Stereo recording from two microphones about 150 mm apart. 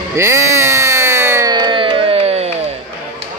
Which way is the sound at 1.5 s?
30° right (ahead or behind).